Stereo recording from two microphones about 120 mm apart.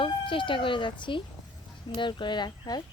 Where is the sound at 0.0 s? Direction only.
45° left (ahead or behind).